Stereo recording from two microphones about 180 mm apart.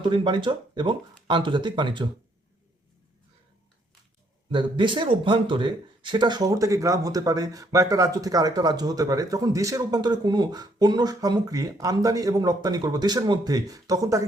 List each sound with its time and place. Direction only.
0.1 s speech: 25° right (ahead or behind)
4.5 s speech: 25° right (ahead or behind)